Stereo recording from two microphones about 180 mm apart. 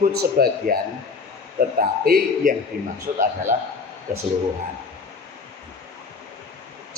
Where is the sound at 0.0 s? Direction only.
55° right (ahead or behind).